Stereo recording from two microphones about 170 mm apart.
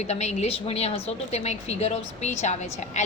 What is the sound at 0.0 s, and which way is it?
A woman's voice, 40° left (ahead or behind).